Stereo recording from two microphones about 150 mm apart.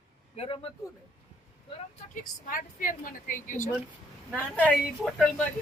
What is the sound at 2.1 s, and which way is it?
A woman's voice, 65° left (ahead or behind).